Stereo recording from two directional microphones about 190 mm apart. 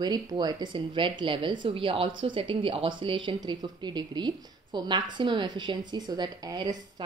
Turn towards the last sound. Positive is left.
turn(degrees=-20)  # may be behind; listen again after turning